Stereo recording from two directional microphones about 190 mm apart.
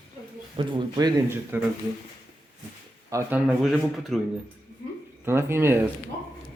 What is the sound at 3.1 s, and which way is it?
Speech, 10° right (ahead or behind).